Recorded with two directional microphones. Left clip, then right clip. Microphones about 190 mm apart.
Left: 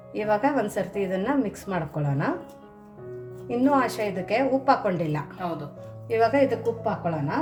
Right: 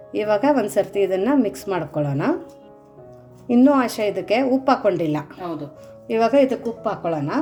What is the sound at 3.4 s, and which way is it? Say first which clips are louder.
A woman's voice: right 6 dB; 40° right (ahead or behind).